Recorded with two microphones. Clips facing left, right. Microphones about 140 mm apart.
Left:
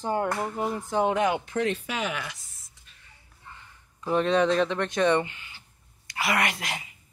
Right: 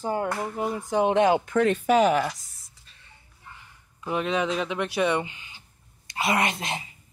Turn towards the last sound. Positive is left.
turn(degrees=-25)  # may be behind; listen again after turning